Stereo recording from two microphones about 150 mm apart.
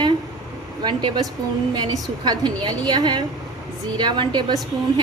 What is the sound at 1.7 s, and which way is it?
A woman's voice, 30° right (ahead or behind).